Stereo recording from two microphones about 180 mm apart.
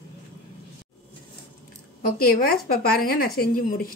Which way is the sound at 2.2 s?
55° left (ahead or behind).